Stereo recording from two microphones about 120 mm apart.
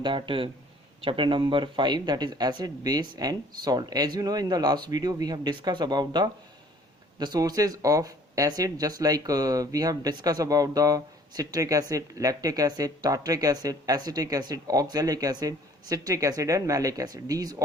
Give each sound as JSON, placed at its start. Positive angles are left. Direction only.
{"t": 0.0, "sound": "a man's voice", "side_deg": -45}